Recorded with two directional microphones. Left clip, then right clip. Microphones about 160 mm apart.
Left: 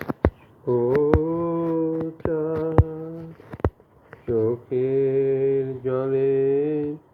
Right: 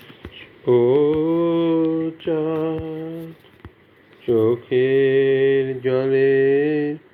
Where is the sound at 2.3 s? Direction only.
10° right (ahead or behind).